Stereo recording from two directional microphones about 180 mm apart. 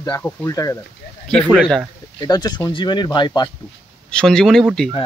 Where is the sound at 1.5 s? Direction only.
5° right (ahead or behind).